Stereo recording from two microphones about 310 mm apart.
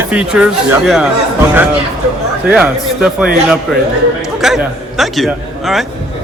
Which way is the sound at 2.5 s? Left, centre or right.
Centre.